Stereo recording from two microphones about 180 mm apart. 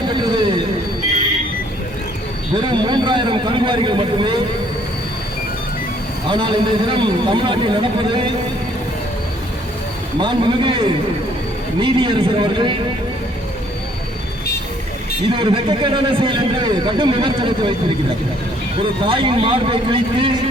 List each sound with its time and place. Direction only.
0.1 s vehicle: 25° right (ahead or behind)
2.6 s a man's voice: 25° right (ahead or behind)
6.2 s a man's voice: 25° right (ahead or behind)
10.2 s a man's voice: 25° right (ahead or behind)
15.3 s a man's voice: 30° right (ahead or behind)
19.0 s a man's voice: 30° right (ahead or behind)